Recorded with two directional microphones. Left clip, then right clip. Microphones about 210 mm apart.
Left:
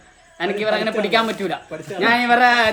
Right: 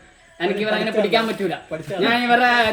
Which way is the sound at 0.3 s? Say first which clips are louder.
Left 1 dB; 30° left (ahead or behind).